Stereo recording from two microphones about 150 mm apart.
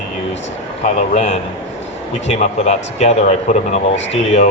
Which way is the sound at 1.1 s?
45° left (ahead or behind).